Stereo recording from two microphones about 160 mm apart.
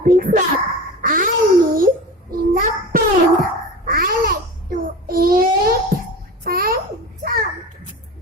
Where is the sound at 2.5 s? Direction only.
65° right (ahead or behind).